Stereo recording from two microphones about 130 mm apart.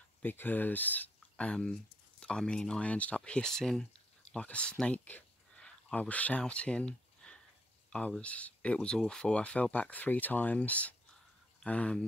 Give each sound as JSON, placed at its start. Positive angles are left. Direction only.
{"t": 0.2, "sound": "speech", "side_deg": 15}